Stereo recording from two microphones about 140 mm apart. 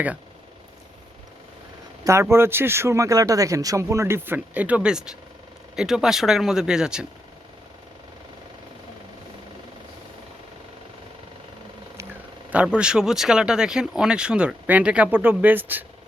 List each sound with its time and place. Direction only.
2.0 s speech: 20° right (ahead or behind)
12.6 s speech: 5° right (ahead or behind)